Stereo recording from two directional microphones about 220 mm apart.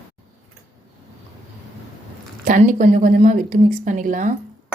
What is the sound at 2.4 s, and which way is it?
A woman's voice, 35° right (ahead or behind).